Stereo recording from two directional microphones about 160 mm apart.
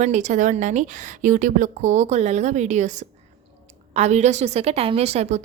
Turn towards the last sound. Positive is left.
turn(degrees=-45)  # may be behind; listen again after turning